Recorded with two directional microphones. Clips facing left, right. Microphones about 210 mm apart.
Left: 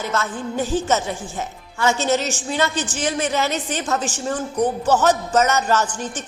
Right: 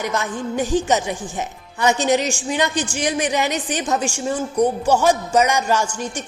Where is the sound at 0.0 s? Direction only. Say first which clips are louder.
Right 1 dB; 15° right (ahead or behind).